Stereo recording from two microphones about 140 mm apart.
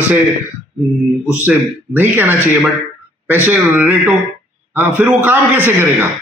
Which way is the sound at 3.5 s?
10° right (ahead or behind).